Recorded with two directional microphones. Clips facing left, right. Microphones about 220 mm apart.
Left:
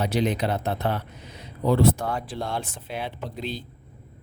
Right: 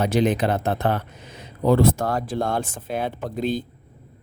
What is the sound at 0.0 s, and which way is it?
Speech, 50° right (ahead or behind).